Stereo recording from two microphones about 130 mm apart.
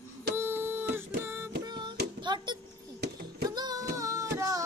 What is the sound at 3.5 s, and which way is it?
Music, 30° right (ahead or behind).